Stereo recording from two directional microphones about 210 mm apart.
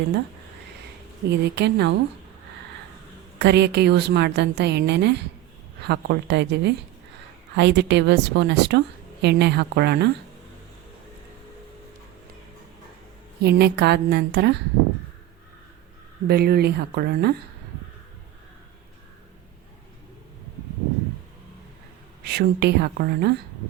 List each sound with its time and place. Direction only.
1.3 s a woman's voice: 55° right (ahead or behind)
3.3 s a woman's voice: 55° right (ahead or behind)
13.4 s a woman's voice: 50° right (ahead or behind)
16.2 s a woman's voice: 50° right (ahead or behind)
22.2 s a woman's voice: 50° right (ahead or behind)